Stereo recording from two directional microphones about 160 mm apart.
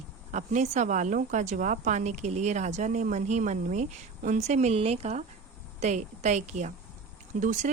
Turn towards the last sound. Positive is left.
turn(degrees=-50)  # may be behind; listen again after turning